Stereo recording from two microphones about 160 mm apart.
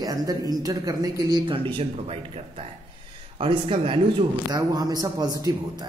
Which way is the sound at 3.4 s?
30° right (ahead or behind).